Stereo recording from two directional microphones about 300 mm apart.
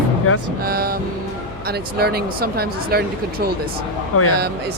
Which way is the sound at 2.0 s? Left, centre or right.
Right.